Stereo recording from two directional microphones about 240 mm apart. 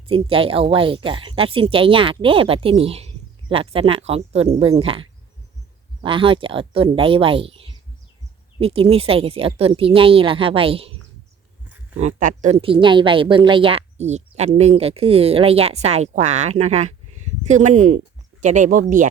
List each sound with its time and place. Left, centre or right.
0.1 s a woman's voice: right
11.9 s a woman's voice: right